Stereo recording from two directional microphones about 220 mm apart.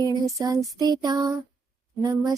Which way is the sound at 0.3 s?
15° right (ahead or behind).